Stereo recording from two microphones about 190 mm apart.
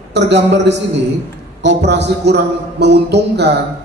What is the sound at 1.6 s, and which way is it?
A man's voice, 65° right (ahead or behind).